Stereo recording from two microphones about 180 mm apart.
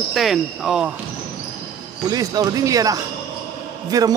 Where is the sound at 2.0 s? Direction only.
20° right (ahead or behind).